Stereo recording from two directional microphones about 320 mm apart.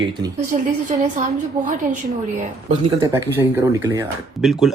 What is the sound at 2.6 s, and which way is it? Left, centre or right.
Speech, centre.